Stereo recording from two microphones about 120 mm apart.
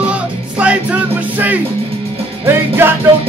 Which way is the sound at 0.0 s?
10° right (ahead or behind).